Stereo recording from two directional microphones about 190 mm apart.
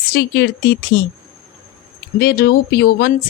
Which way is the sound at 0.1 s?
60° left (ahead or behind).